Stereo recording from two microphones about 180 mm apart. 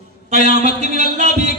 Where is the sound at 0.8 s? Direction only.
40° right (ahead or behind).